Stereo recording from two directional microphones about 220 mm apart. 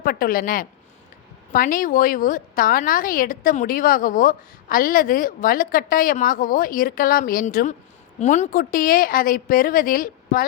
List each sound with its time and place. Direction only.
0.0 s a woman's voice: 40° left (ahead or behind)